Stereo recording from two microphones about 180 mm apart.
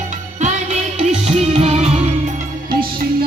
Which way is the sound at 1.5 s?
35° right (ahead or behind).